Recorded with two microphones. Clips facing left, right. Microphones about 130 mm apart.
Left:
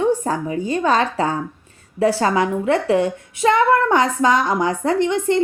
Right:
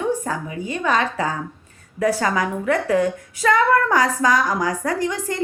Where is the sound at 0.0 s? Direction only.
30° left (ahead or behind).